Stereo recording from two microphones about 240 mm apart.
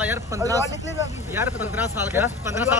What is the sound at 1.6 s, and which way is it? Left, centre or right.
Speech, centre.